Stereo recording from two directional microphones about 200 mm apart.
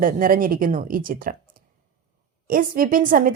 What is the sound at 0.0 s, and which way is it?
A woman's voice, 45° right (ahead or behind).